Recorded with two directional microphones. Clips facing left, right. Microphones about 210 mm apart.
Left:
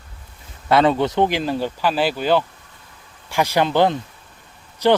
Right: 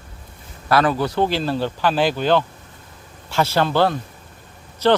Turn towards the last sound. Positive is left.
turn(degrees=15)  # may be behind; listen again after turning